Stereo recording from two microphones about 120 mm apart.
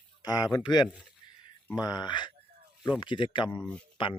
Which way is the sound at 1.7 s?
35° left (ahead or behind).